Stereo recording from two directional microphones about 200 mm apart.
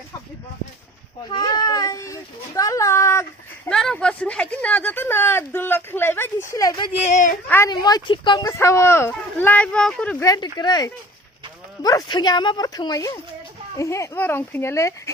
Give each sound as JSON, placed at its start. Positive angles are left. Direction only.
{"t": 1.3, "sound": "baby cry", "side_deg": 20}
{"t": 2.6, "sound": "a sound", "side_deg": 15}
{"t": 3.7, "sound": "speech", "side_deg": 5}
{"t": 7.1, "sound": "a woman's voice", "side_deg": 35}
{"t": 7.4, "sound": "speech", "side_deg": 10}
{"t": 10.2, "sound": "speech", "side_deg": 20}